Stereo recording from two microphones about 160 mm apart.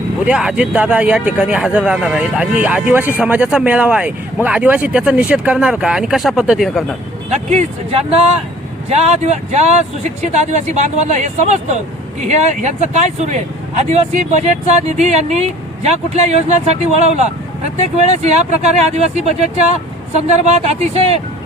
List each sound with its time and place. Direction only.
0.3 s speech: 5° right (ahead or behind)
7.3 s speech: 45° right (ahead or behind)
17.7 s speech: 45° right (ahead or behind)